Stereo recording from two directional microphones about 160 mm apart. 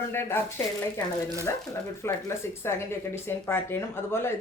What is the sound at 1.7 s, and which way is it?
A woman's voice, 15° left (ahead or behind).